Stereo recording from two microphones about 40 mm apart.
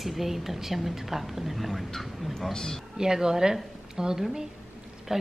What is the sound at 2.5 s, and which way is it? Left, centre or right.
Speech, centre.